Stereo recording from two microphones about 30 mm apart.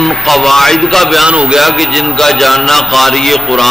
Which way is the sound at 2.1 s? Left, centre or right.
Centre.